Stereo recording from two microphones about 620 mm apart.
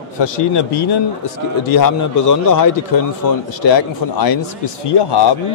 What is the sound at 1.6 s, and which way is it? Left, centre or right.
A man's voice, left.